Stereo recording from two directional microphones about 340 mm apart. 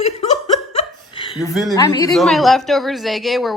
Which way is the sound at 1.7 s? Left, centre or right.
Centre.